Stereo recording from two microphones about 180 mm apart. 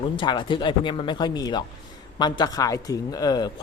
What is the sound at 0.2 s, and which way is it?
Speech, 25° left (ahead or behind).